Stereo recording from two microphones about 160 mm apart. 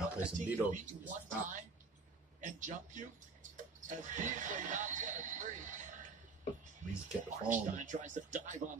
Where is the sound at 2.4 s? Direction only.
50° right (ahead or behind).